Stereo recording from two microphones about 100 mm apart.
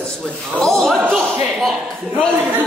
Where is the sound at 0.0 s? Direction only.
5° left (ahead or behind).